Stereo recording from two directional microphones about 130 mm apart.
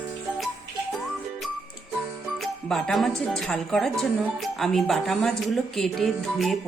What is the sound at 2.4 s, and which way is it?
Speech, 5° left (ahead or behind).